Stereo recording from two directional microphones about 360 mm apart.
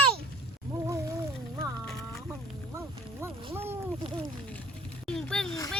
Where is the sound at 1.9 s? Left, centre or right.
Centre.